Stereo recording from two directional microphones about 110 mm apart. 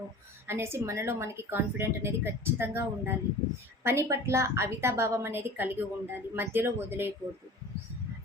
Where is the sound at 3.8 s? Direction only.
25° right (ahead or behind).